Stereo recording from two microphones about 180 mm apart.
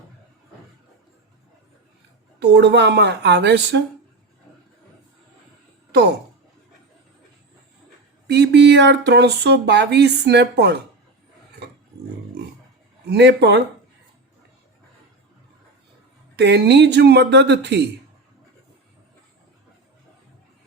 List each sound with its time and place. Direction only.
2.4 s speech: 70° right (ahead or behind)
8.3 s speech: 70° right (ahead or behind)
13.1 s speech: 70° right (ahead or behind)
16.3 s speech: 70° right (ahead or behind)